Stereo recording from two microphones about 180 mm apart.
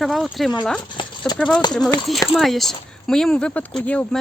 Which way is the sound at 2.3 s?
Centre (ahead or behind).